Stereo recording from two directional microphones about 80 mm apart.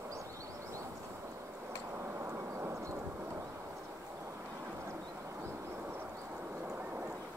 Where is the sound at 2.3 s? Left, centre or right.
Right.